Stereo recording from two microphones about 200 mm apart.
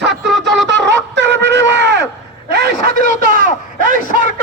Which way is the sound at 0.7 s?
60° right (ahead or behind).